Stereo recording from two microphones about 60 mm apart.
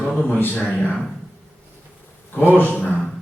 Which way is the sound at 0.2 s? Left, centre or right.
Left.